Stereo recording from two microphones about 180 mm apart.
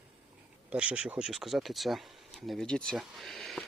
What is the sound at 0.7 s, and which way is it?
Speech, 5° right (ahead or behind).